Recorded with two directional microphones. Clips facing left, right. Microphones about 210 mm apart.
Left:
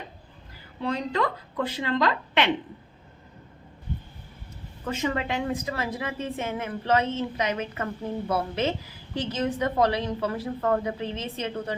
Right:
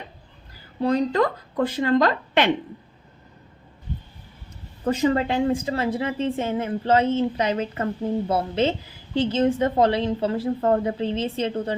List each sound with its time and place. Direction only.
0.8 s a woman's voice: 40° right (ahead or behind)
4.8 s a woman's voice: 35° right (ahead or behind)